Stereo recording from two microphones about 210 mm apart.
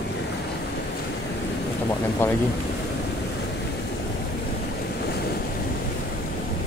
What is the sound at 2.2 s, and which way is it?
Speech, 10° left (ahead or behind).